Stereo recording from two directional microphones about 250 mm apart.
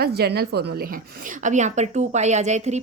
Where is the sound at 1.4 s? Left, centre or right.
Right.